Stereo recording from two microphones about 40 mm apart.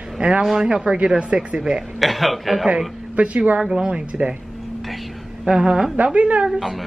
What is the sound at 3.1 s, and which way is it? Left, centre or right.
Speech, right.